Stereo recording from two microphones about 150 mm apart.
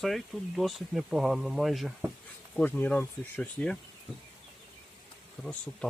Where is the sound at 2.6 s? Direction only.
10° left (ahead or behind).